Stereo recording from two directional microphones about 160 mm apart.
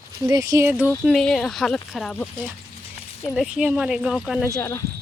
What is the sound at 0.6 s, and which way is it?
Speech, 10° right (ahead or behind).